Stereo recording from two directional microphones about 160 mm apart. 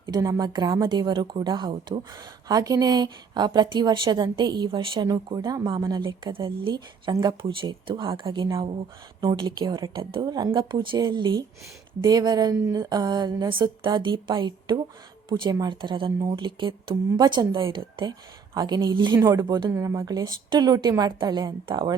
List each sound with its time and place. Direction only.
0.1 s speech: 20° right (ahead or behind)